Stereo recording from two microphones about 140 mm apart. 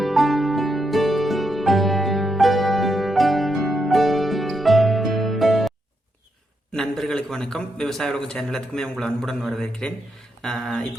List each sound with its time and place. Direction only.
0.0 s music: centre (ahead or behind)
6.7 s a man's voice: centre (ahead or behind)